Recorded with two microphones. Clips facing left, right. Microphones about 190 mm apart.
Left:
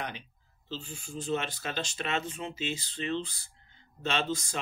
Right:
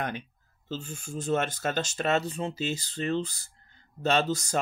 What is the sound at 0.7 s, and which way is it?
Speech, 45° right (ahead or behind).